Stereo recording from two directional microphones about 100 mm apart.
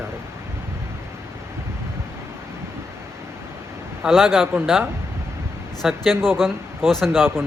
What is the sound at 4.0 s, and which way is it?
Speech, centre (ahead or behind).